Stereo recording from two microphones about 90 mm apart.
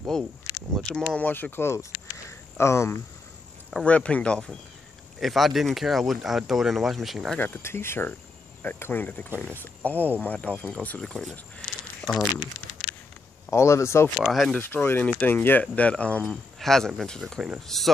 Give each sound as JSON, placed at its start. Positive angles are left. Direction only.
{"t": 0.1, "sound": "speech", "side_deg": 5}
{"t": 1.1, "sound": "speech", "side_deg": 20}
{"t": 3.8, "sound": "speech", "side_deg": 15}
{"t": 5.2, "sound": "speech", "side_deg": 0}
{"t": 7.3, "sound": "speech", "side_deg": 25}
{"t": 9.9, "sound": "speech", "side_deg": -20}
{"t": 10.2, "sound": "speech", "side_deg": 15}
{"t": 13.5, "sound": "speech", "side_deg": 30}
{"t": 14.2, "sound": "speech", "side_deg": 0}
{"t": 14.6, "sound": "speech", "side_deg": 25}